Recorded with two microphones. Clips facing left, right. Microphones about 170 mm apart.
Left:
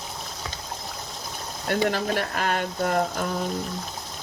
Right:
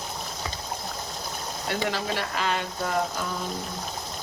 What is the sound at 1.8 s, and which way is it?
Speech, 50° left (ahead or behind).